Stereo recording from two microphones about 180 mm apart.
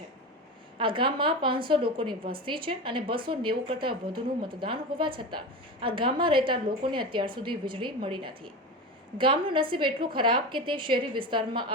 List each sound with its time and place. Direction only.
0.8 s a woman's voice: 30° right (ahead or behind)